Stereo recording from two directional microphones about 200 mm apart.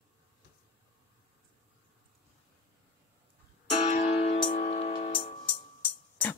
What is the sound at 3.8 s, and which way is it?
Music, 35° left (ahead or behind).